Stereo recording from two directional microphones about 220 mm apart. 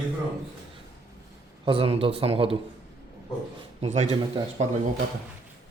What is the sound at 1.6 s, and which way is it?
Speech, 25° right (ahead or behind).